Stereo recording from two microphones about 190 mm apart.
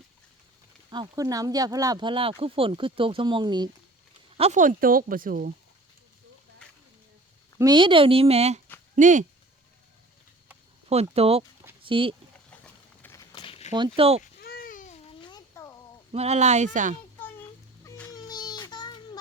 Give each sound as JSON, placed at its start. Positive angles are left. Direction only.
{"t": 0.9, "sound": "speech", "side_deg": -20}
{"t": 4.4, "sound": "speech", "side_deg": -35}
{"t": 7.6, "sound": "speech", "side_deg": -25}
{"t": 10.8, "sound": "speech", "side_deg": -35}
{"t": 12.5, "sound": "clip-clop", "side_deg": 10}
{"t": 13.3, "sound": "a sound", "side_deg": 30}
{"t": 13.7, "sound": "speech", "side_deg": -25}
{"t": 14.4, "sound": "a sound", "side_deg": 50}
{"t": 16.1, "sound": "speech", "side_deg": -35}
{"t": 17.8, "sound": "music", "side_deg": 5}
{"t": 18.1, "sound": "child singing", "side_deg": 20}